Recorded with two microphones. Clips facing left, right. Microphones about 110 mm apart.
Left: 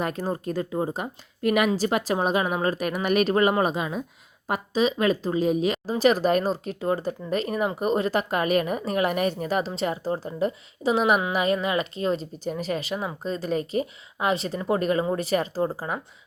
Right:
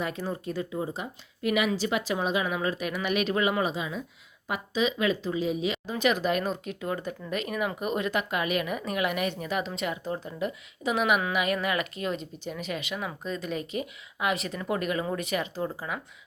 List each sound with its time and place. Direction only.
0.0 s speech: 45° left (ahead or behind)
4.4 s speech: 40° left (ahead or behind)